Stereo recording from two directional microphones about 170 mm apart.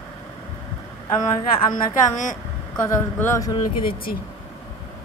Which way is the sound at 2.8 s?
15° left (ahead or behind).